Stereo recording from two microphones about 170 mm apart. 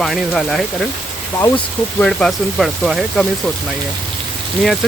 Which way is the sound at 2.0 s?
5° left (ahead or behind).